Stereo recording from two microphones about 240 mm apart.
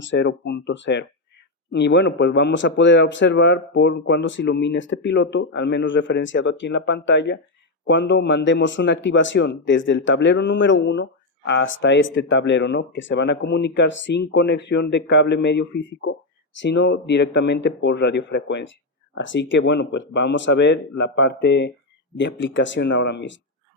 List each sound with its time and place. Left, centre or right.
0.0 s speech: left